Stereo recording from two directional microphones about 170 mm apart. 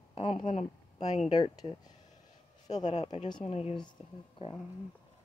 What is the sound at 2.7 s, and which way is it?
Speech, 45° left (ahead or behind).